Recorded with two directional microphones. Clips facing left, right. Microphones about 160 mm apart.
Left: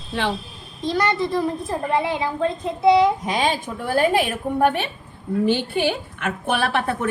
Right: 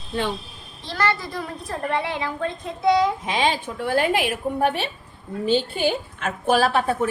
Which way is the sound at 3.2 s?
40° left (ahead or behind).